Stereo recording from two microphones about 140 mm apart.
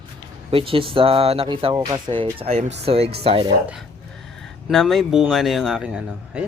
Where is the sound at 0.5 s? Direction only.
40° right (ahead or behind).